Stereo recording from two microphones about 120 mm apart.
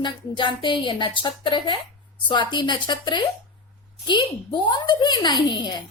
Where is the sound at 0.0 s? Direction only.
40° left (ahead or behind).